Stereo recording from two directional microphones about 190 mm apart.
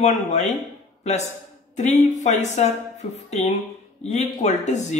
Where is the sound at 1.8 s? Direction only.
40° left (ahead or behind).